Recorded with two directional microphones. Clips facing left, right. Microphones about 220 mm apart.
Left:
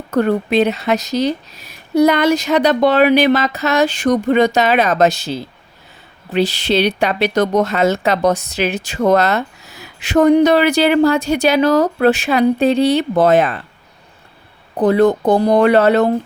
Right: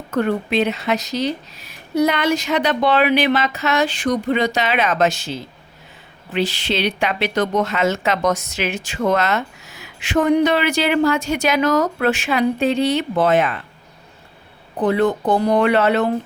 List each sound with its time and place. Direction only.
0.1 s speech: 40° left (ahead or behind)
14.8 s speech: 40° left (ahead or behind)